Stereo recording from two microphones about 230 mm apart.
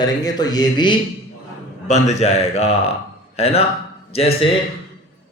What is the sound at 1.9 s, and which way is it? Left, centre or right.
A man's voice, left.